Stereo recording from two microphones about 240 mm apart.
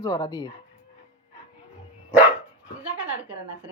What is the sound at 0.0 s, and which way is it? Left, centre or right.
Speech, centre.